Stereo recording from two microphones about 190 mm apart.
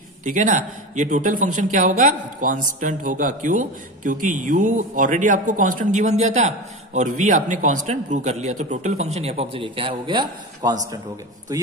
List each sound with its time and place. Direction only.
0.2 s a man's voice: 40° right (ahead or behind); by 11.6 s 20° right (ahead or behind)